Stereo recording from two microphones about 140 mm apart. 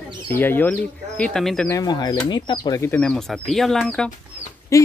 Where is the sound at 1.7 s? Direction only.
30° left (ahead or behind).